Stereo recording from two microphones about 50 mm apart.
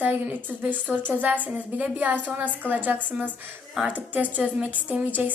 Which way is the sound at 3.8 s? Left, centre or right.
Centre.